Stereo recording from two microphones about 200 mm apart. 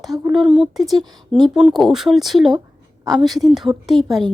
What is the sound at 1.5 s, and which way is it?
A woman's voice, centre (ahead or behind).